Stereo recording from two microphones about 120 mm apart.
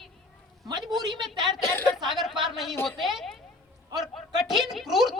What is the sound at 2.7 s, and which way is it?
Speech, 20° left (ahead or behind).